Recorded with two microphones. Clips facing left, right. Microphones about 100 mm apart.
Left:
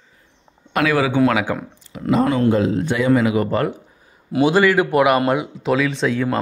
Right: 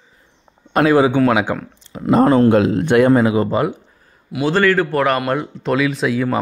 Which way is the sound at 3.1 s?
35° right (ahead or behind).